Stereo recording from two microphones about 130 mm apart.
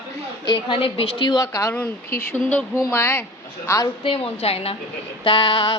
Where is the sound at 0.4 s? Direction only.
40° left (ahead or behind).